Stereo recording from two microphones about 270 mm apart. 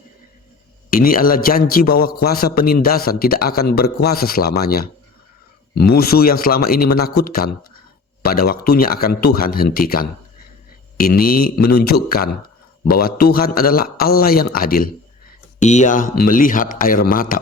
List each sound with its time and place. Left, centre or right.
0.9 s a man's voice: left